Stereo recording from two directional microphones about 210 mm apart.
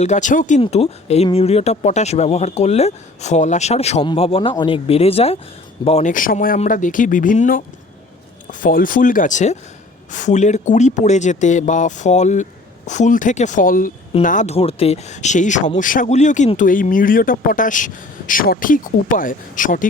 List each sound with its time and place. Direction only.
0.0 s speech: 35° left (ahead or behind)